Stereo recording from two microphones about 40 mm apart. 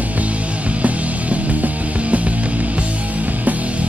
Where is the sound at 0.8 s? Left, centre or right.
Right.